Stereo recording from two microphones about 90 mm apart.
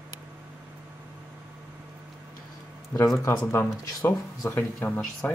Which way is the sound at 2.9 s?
30° left (ahead or behind).